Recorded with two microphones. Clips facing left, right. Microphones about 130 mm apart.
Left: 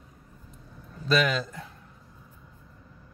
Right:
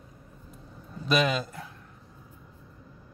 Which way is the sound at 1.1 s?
20° right (ahead or behind).